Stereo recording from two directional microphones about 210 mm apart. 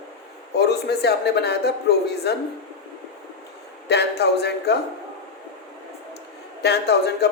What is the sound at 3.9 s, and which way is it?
Speech, 50° left (ahead or behind).